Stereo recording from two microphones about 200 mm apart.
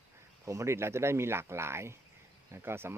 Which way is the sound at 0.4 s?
15° right (ahead or behind).